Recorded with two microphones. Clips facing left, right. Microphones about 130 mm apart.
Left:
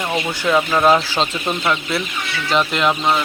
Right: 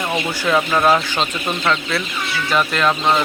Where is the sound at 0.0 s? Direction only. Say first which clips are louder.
Even; 5° left (ahead or behind).